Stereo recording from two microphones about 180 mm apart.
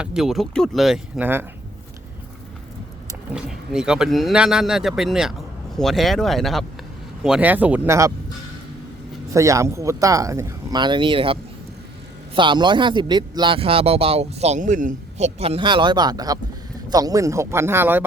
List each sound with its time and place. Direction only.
0.0 s speech: 5° right (ahead or behind)
3.3 s speech: 5° right (ahead or behind)
9.3 s speech: 15° right (ahead or behind)